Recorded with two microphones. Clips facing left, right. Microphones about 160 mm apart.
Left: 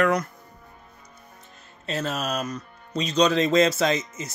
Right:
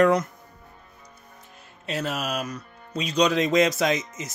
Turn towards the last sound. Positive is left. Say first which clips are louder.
# left 1 dB
turn(degrees=-15)  # may be behind; listen again after turning